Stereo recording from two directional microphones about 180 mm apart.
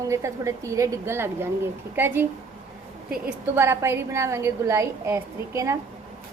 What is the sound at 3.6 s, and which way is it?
A woman's voice, 15° right (ahead or behind).